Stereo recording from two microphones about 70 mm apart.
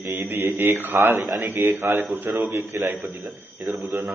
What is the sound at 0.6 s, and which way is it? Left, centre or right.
Speech, right.